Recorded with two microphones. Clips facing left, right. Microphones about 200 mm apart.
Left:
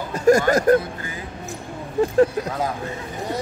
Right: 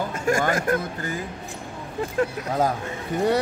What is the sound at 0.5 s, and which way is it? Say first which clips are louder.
Speech: left 7 dB; 40° left (ahead or behind).